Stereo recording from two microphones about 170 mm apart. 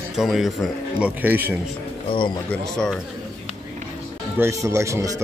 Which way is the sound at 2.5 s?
5° left (ahead or behind).